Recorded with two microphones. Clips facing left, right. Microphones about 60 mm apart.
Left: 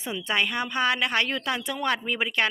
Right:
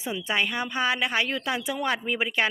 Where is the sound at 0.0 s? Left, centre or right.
Centre.